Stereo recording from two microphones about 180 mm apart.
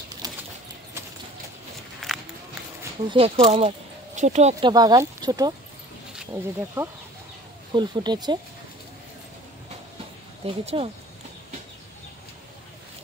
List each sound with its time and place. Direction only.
0.2 s bird flight: 20° right (ahead or behind)
2.0 s walk: centre (ahead or behind)
3.1 s speech: 35° right (ahead or behind)
4.6 s speech: 20° right (ahead or behind)
10.4 s speech: 35° right (ahead or behind)